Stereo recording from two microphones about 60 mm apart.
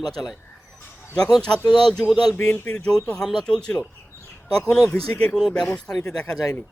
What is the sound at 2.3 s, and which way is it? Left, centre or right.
Speech, left.